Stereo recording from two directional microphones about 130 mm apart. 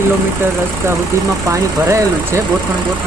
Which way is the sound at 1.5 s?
25° right (ahead or behind).